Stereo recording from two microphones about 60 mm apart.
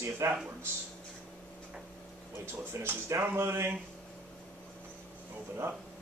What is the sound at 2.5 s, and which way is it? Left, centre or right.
Speech, right.